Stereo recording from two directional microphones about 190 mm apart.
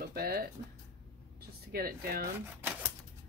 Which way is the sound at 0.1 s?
50° right (ahead or behind).